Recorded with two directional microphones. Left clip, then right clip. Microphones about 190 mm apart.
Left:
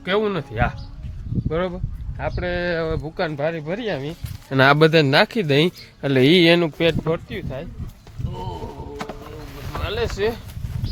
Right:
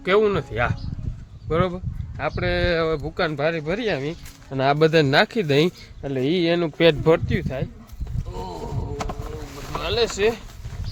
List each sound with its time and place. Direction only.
0.0 s speech: 10° right (ahead or behind)
4.5 s speech: 35° left (ahead or behind)
4.8 s speech: 10° left (ahead or behind)
6.0 s speech: 35° left (ahead or behind)
6.8 s speech: 15° right (ahead or behind)
7.3 s speech: 35° right (ahead or behind)
9.7 s a sound: 25° right (ahead or behind)
10.2 s speech: 10° right (ahead or behind)